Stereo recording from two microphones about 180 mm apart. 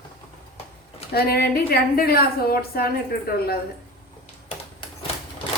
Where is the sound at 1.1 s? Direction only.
60° left (ahead or behind).